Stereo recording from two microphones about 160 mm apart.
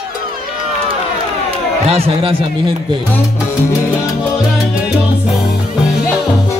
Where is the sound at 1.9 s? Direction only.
35° right (ahead or behind).